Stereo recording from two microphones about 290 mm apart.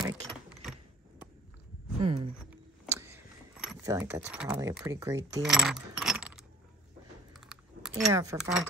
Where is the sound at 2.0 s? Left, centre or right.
Centre.